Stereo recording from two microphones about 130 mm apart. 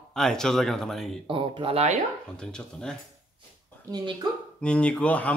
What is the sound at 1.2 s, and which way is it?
Speech, 40° right (ahead or behind).